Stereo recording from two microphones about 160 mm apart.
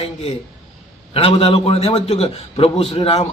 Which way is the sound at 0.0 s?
40° left (ahead or behind).